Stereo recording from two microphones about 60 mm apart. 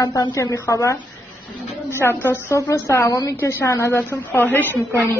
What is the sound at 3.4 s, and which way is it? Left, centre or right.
A woman's voice, left.